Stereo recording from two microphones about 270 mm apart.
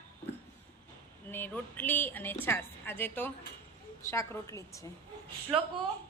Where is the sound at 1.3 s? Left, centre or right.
Centre.